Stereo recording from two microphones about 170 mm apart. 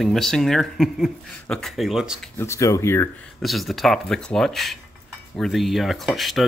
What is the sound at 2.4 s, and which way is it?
Speech, 15° left (ahead or behind).